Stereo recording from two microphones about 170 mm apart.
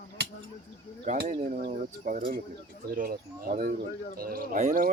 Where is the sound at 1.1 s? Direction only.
45° right (ahead or behind).